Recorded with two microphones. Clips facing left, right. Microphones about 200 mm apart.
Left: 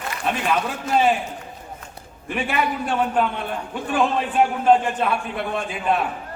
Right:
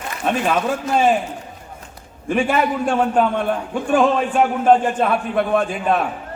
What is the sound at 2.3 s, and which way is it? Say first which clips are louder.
Speech: right 5 dB; 45° right (ahead or behind).